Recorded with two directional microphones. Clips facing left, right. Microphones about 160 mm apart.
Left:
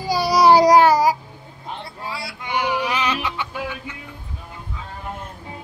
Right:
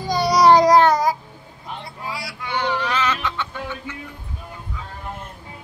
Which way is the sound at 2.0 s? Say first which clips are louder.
Even; 25° left (ahead or behind).